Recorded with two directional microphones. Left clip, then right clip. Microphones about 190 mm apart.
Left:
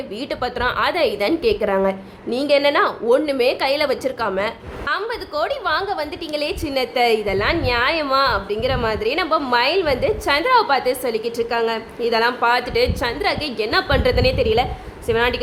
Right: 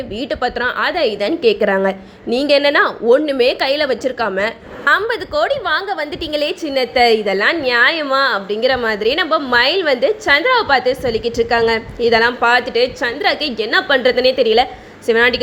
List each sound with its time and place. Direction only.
0.2 s a woman's voice: 10° right (ahead or behind)
4.9 s a woman's voice: 35° right (ahead or behind)
5.3 s a woman's voice: 15° right (ahead or behind)